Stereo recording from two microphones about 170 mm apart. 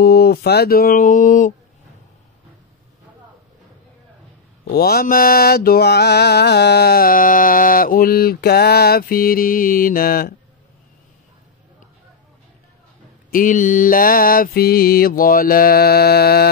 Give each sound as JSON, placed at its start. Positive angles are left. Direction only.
{"t": 0.0, "sound": "mantra", "side_deg": 65}
{"t": 4.6, "sound": "mantra", "side_deg": 65}
{"t": 13.3, "sound": "mantra", "side_deg": 50}